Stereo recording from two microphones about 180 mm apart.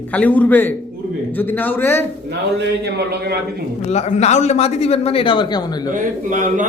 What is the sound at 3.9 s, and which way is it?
A man's voice, 40° left (ahead or behind).